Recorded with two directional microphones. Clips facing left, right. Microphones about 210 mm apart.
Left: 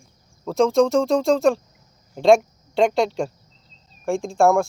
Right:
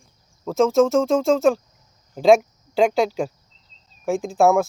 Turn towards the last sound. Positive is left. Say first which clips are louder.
# even
turn(degrees=0)  # may be behind; listen again after turning